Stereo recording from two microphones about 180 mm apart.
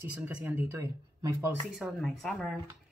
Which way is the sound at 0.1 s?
10° right (ahead or behind).